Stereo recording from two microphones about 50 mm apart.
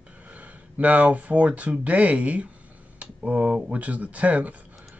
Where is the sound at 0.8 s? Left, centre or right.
Right.